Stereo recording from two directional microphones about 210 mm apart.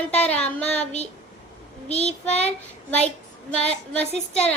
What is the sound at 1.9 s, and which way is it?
Child singing, 30° left (ahead or behind).